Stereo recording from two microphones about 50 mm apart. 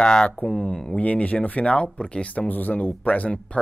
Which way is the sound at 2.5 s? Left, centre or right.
Left.